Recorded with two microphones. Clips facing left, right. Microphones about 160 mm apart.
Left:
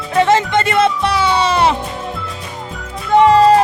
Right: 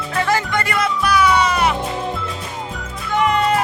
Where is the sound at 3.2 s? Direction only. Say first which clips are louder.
Left 8 dB; 30° left (ahead or behind).